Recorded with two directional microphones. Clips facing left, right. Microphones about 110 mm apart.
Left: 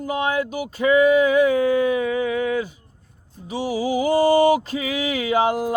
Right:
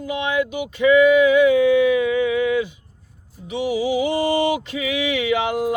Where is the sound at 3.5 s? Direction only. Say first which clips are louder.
Right 2 dB; 35° left (ahead or behind).